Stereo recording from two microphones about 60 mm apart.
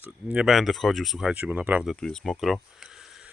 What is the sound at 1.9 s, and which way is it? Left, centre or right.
Speech, centre.